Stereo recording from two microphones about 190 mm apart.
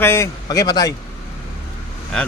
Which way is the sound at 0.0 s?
15° left (ahead or behind).